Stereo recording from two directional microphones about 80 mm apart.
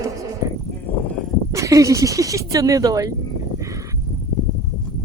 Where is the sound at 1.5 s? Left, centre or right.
Right.